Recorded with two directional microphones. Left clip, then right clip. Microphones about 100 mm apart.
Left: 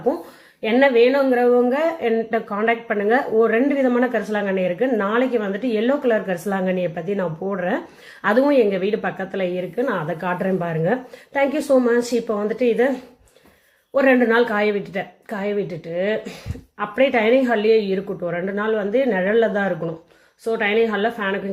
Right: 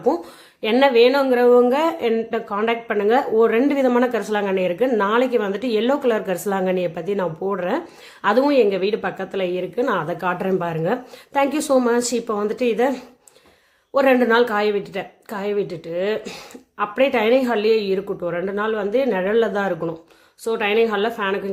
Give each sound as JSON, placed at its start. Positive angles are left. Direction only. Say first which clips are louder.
{"t": 0.6, "sound": "speech", "louder": "right 1 dB", "side_deg": -35}
{"t": 1.3, "sound": "a woman's voice", "louder": "right 2 dB", "side_deg": -45}